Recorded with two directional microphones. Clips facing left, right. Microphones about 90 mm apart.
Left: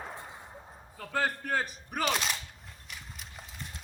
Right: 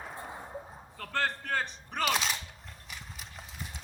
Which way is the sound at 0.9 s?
10° left (ahead or behind).